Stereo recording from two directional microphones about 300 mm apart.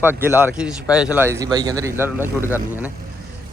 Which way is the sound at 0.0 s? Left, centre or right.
Centre.